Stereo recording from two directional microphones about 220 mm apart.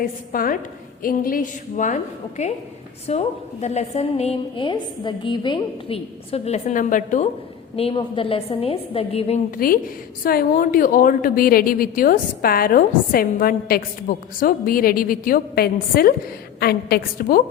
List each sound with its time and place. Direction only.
0.0 s a woman's voice: 40° left (ahead or behind)
7.8 s a woman's voice: 25° left (ahead or behind)
9.6 s a woman's voice: 40° left (ahead or behind)